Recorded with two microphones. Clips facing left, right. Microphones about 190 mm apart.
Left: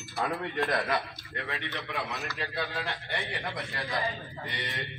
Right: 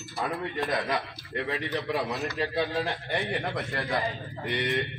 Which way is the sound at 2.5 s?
25° right (ahead or behind).